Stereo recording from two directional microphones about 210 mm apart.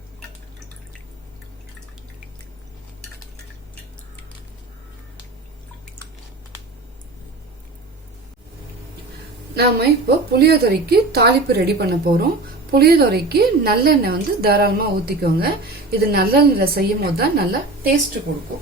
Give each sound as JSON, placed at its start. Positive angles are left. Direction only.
{"t": 9.6, "sound": "a woman's voice", "side_deg": -50}